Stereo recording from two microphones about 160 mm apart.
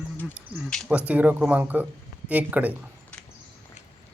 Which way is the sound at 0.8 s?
10° right (ahead or behind).